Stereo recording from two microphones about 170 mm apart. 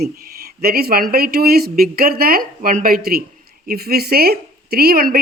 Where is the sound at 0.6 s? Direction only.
60° right (ahead or behind).